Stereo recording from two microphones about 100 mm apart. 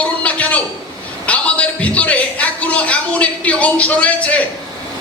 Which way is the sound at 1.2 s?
15° left (ahead or behind).